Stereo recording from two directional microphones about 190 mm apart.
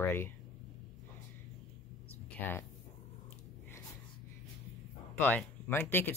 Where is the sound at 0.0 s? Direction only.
10° left (ahead or behind).